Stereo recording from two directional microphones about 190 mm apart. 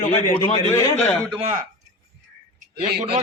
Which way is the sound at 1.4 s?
35° right (ahead or behind).